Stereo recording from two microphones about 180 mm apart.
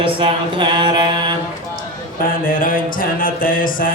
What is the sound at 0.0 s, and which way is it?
Mantra, 30° right (ahead or behind).